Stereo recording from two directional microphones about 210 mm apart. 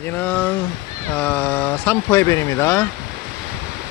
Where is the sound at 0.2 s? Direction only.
10° left (ahead or behind).